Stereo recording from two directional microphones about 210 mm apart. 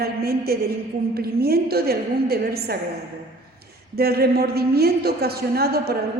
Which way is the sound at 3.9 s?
50° right (ahead or behind).